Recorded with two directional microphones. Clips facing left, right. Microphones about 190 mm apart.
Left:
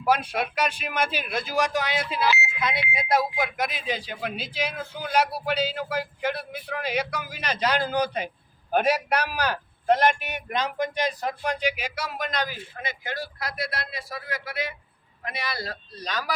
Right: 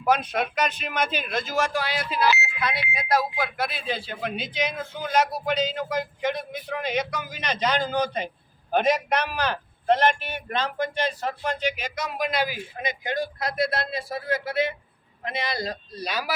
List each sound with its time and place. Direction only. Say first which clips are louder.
0.0 s a man's voice: right 1 dB; 10° left (ahead or behind); by 16.3 s 10° right (ahead or behind)